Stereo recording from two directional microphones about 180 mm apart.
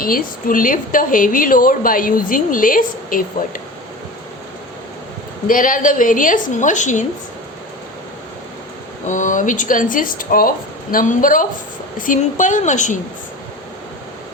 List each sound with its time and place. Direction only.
0.0 s a woman's voice: 50° left (ahead or behind)
5.5 s a woman's voice: 50° left (ahead or behind)
9.0 s a woman's voice: 45° left (ahead or behind)